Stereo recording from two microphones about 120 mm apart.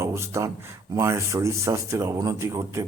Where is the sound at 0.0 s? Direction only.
25° right (ahead or behind).